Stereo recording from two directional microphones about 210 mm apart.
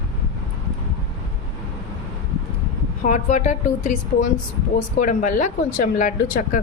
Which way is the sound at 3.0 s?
35° left (ahead or behind).